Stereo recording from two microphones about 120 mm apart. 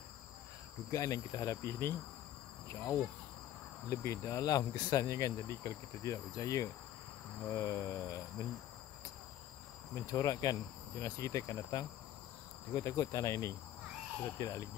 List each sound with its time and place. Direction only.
0.9 s speech: 30° left (ahead or behind)
9.9 s speech: 30° left (ahead or behind)